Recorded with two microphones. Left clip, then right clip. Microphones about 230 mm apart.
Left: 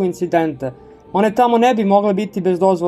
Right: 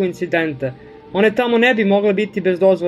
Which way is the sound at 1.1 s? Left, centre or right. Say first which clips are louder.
Left 1 dB; centre.